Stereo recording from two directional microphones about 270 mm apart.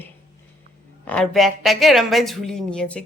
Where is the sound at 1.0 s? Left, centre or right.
Centre.